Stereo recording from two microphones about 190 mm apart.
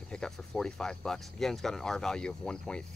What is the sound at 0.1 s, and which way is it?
Speech, centre (ahead or behind).